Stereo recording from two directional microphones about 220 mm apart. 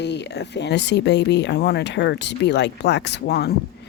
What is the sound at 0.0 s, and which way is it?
Speech, 50° left (ahead or behind).